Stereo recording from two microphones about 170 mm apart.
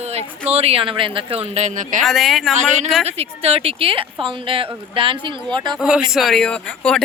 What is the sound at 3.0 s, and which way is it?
Speech, 35° right (ahead or behind).